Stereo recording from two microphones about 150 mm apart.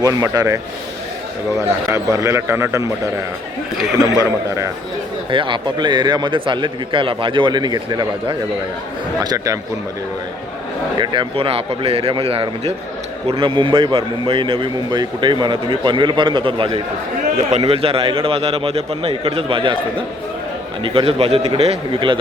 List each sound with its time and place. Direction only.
0.0 s a man's voice: 25° right (ahead or behind)
4.2 s a man's voice: 20° right (ahead or behind)
5.3 s a man's voice: 35° right (ahead or behind)
10.9 s a man's voice: 30° right (ahead or behind)